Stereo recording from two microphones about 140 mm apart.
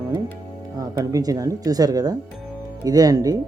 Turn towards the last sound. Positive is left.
turn(degrees=-25)  # may be behind; listen again after turning